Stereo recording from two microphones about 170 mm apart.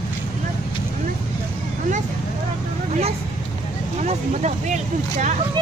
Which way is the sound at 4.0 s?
45° right (ahead or behind).